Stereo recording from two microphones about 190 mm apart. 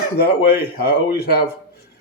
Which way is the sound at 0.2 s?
55° left (ahead or behind).